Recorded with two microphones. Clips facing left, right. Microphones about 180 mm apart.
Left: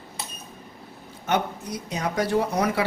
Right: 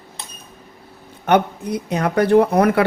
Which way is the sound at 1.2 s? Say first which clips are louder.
Right 8 dB; 60° right (ahead or behind).